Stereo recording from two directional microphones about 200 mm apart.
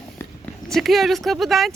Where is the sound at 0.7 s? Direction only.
Centre (ahead or behind).